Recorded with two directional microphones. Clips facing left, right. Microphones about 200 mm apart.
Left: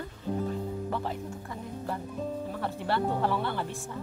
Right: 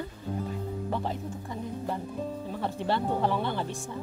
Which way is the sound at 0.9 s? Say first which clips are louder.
Right 1 dB; 20° right (ahead or behind).